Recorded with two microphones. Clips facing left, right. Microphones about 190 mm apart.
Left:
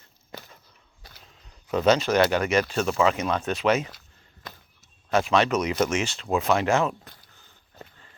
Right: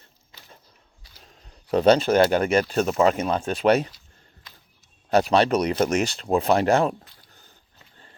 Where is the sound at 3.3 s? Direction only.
30° right (ahead or behind).